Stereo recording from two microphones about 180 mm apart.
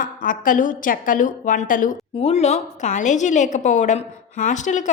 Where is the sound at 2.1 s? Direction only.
35° left (ahead or behind).